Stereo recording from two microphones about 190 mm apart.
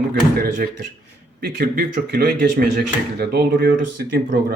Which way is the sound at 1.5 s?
50° right (ahead or behind).